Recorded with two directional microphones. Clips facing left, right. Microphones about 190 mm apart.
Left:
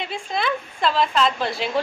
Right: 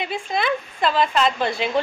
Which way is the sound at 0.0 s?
Centre (ahead or behind).